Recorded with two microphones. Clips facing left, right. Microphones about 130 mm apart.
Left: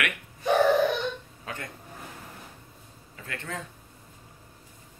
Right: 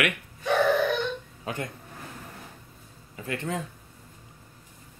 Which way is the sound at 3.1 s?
20° right (ahead or behind).